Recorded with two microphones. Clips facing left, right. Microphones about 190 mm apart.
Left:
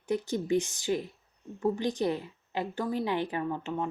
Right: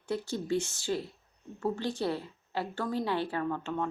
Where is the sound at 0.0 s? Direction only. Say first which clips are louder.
Left 3 dB; 15° left (ahead or behind).